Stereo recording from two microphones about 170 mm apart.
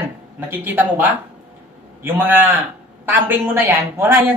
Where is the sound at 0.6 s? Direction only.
10° right (ahead or behind).